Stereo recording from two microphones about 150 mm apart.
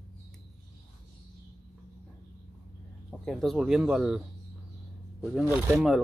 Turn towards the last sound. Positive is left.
turn(degrees=-20)  # may be behind; listen again after turning